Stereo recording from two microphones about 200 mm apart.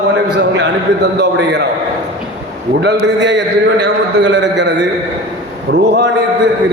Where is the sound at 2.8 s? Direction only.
65° right (ahead or behind).